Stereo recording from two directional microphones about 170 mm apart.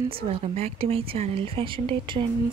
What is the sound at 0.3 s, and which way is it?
Speech, 40° right (ahead or behind).